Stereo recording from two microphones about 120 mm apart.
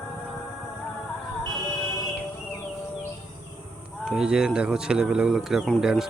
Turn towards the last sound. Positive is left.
turn(degrees=-5)  # may be behind; listen again after turning